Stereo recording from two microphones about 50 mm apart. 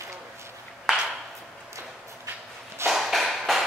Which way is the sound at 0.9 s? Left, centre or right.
Centre.